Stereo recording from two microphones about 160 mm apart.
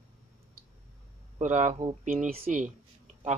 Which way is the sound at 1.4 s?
50° right (ahead or behind).